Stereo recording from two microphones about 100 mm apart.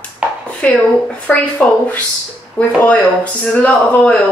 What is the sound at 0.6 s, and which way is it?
Speech, 15° left (ahead or behind).